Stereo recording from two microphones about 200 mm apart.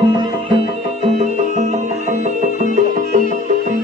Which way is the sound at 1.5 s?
35° right (ahead or behind).